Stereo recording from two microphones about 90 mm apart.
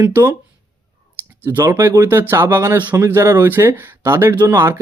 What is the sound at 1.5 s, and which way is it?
Speech, 30° right (ahead or behind).